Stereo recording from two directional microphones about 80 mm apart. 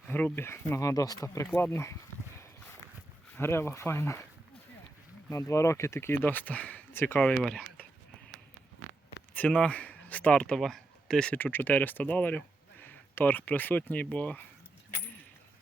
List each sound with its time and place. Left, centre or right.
0.3 s speech: left
1.5 s speech: left
3.3 s speech: left
5.3 s speech: left
7.3 s speech: centre
9.3 s speech: centre
11.3 s speech: left